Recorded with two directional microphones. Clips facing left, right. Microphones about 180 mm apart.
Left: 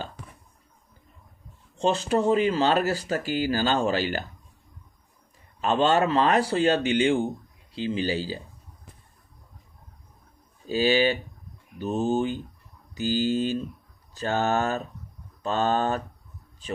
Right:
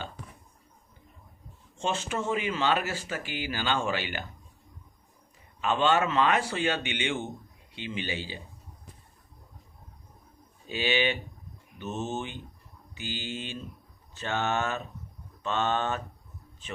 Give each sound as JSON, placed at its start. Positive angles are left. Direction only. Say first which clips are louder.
{"t": 1.8, "sound": "speech", "louder": "left 8 dB", "side_deg": 35}
{"t": 5.5, "sound": "speech", "louder": "left 3 dB", "side_deg": 40}
{"t": 10.7, "sound": "speech", "louder": "left 6 dB", "side_deg": 40}